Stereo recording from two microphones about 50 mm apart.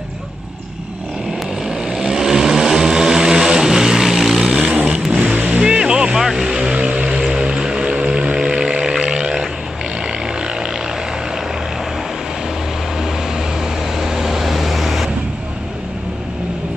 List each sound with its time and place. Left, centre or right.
1.7 s vehicle: centre
4.5 s vehicle: centre
5.1 s vehicle: right; by 9.5 s centre
13.9 s vehicle: centre